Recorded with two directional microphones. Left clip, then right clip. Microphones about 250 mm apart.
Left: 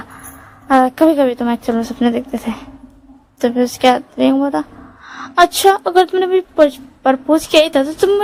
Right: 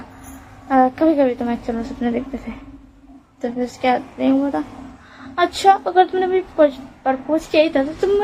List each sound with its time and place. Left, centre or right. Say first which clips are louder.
0.7 s speech: left 4 dB; left